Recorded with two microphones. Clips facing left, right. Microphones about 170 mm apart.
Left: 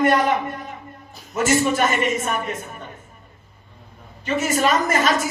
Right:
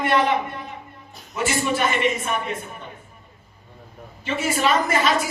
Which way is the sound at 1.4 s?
45° left (ahead or behind).